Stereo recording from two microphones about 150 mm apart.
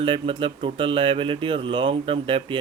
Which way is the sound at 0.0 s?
40° right (ahead or behind).